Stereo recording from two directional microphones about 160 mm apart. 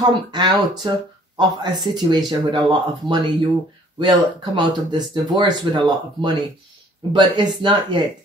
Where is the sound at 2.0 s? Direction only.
30° right (ahead or behind).